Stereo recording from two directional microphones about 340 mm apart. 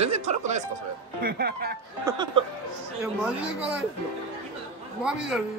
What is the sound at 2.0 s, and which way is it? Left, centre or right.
Speech, centre.